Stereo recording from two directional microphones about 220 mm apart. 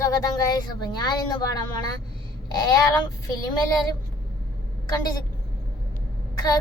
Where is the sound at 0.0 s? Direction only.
15° left (ahead or behind).